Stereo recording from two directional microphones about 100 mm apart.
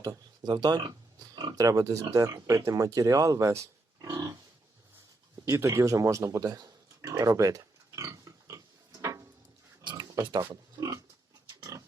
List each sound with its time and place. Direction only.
0.0 s speech: 40° right (ahead or behind)
5.5 s a sound: 30° right (ahead or behind)
9.9 s pig: 30° right (ahead or behind)